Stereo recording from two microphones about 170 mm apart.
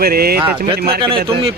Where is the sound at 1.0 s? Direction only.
30° right (ahead or behind).